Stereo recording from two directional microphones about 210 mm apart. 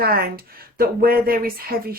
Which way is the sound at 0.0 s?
45° right (ahead or behind).